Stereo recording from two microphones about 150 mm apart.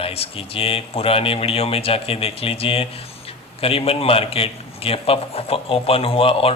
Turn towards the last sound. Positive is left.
turn(degrees=40)  # may be behind; listen again after turning